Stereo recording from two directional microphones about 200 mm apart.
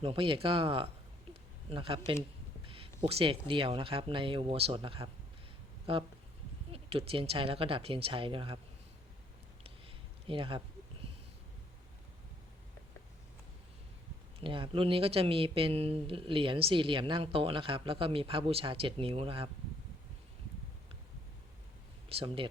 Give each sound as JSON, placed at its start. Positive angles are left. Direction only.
{"t": 0.0, "sound": "speech", "side_deg": -25}
{"t": 1.3, "sound": "a sound", "side_deg": -25}
{"t": 3.0, "sound": "speech", "side_deg": -25}
{"t": 9.6, "sound": "a sound", "side_deg": -25}
{"t": 14.4, "sound": "speech", "side_deg": -25}
{"t": 22.1, "sound": "speech", "side_deg": -30}